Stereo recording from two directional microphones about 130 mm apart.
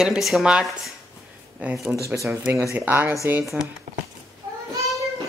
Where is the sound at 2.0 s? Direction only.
25° right (ahead or behind).